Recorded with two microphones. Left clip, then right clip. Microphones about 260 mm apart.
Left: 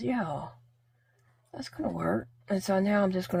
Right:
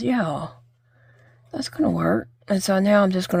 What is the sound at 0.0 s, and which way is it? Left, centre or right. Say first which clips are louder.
Speech: right 8 dB; right.